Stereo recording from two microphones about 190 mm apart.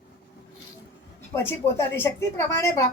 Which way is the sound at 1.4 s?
10° left (ahead or behind).